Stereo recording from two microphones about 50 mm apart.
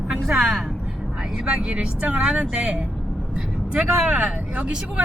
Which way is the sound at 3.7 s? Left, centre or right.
Right.